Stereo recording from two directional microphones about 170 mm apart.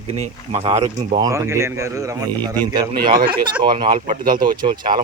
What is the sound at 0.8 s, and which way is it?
A man's voice, 20° right (ahead or behind).